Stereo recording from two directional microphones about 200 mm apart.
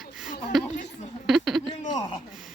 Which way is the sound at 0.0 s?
Centre (ahead or behind).